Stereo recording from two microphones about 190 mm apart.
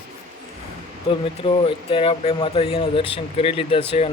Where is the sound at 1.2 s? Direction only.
30° left (ahead or behind).